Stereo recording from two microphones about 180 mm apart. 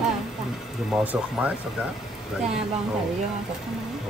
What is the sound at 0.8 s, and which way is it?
Speech, 5° right (ahead or behind).